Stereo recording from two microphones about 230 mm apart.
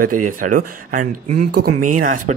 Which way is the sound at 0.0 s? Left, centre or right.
Right.